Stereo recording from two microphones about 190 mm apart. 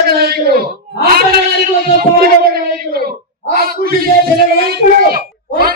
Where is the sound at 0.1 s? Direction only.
55° right (ahead or behind).